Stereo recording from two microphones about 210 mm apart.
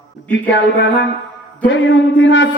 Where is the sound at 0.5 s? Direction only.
60° left (ahead or behind).